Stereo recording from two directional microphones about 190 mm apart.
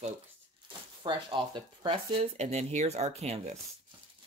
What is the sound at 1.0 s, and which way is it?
Speech, 25° right (ahead or behind).